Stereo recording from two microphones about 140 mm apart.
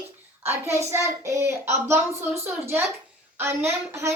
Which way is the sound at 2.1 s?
45° right (ahead or behind).